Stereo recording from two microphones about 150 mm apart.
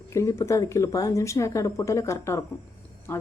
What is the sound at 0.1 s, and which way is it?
Speech, 20° left (ahead or behind).